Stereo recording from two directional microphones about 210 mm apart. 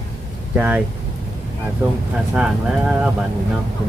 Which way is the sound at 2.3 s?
5° right (ahead or behind).